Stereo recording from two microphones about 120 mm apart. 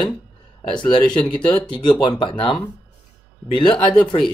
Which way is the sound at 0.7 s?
40° left (ahead or behind).